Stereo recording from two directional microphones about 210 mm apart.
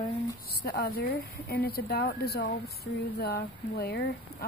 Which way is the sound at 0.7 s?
45° left (ahead or behind).